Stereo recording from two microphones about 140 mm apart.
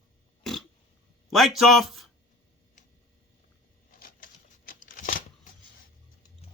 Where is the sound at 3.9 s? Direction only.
90° left.